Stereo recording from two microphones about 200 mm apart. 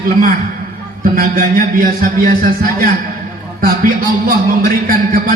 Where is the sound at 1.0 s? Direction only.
45° right (ahead or behind).